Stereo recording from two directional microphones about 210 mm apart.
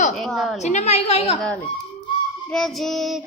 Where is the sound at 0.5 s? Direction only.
35° left (ahead or behind).